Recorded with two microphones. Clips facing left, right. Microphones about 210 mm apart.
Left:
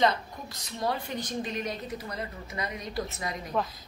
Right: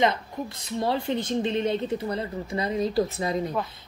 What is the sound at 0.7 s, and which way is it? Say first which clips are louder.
A woman's voice: right 5 dB; 25° right (ahead or behind).